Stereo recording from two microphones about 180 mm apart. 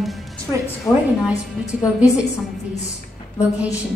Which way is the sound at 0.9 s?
15° left (ahead or behind).